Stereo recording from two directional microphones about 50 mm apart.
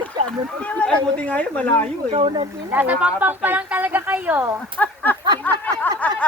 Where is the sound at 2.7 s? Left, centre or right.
Right.